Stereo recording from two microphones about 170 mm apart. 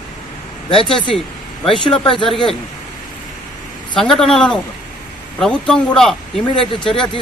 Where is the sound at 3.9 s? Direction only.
5° left (ahead or behind).